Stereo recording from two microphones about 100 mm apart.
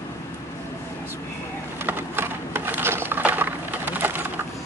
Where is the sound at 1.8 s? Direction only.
20° right (ahead or behind).